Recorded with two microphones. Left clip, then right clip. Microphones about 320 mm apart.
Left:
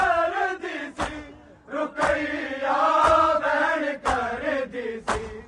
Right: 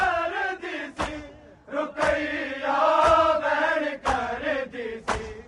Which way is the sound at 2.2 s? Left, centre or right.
Centre.